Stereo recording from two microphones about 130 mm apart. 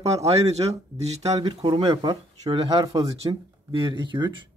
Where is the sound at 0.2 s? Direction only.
55° right (ahead or behind).